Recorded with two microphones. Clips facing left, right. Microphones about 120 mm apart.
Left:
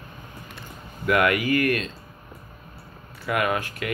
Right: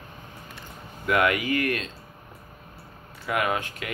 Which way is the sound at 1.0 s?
20° right (ahead or behind).